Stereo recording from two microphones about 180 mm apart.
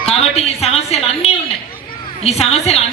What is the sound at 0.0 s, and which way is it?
A woman's voice, 35° left (ahead or behind).